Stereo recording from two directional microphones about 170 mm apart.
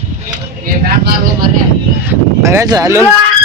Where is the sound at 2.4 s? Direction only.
15° right (ahead or behind).